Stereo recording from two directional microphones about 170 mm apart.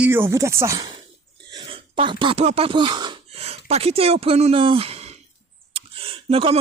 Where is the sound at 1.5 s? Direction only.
30° right (ahead or behind).